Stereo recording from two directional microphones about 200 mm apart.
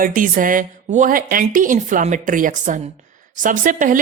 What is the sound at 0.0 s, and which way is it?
Speech, 45° right (ahead or behind).